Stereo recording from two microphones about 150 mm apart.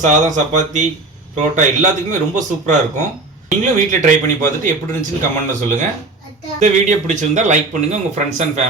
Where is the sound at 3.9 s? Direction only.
60° right (ahead or behind).